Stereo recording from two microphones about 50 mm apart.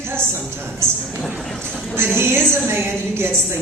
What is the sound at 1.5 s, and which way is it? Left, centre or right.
Speech, centre.